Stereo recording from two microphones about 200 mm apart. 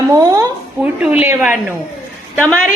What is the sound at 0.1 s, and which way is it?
A woman's voice, 15° right (ahead or behind).